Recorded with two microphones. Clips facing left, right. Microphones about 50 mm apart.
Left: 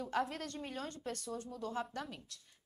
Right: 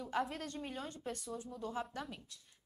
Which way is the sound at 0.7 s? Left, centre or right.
Centre.